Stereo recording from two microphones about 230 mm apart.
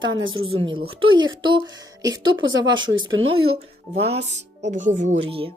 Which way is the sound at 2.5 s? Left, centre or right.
Right.